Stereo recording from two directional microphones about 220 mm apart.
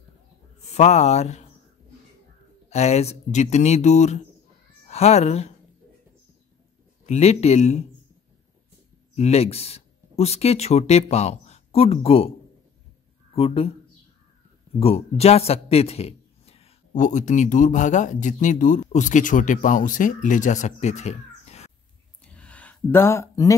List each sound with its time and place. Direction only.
0.7 s a man's voice: 30° left (ahead or behind)
2.7 s a man's voice: 30° left (ahead or behind)
7.1 s a man's voice: 30° left (ahead or behind)
9.1 s speech: 30° left (ahead or behind)
13.3 s speech: 25° left (ahead or behind)
14.8 s a man's voice: 25° left (ahead or behind)
22.2 s a sound: 5° left (ahead or behind)